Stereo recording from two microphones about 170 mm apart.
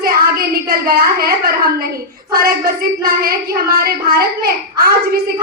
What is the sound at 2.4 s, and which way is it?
Child singing, 60° right (ahead or behind).